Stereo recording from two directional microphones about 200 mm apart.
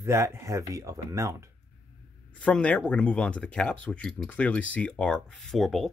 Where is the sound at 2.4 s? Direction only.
5° left (ahead or behind).